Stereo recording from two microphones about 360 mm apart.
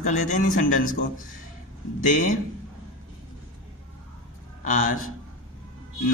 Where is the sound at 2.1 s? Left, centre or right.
Left.